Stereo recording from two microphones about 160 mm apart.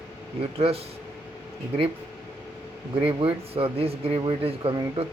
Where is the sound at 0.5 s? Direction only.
40° right (ahead or behind).